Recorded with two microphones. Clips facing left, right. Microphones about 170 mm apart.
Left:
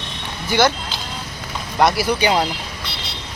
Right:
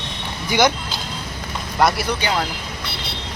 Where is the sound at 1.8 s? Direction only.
Centre (ahead or behind).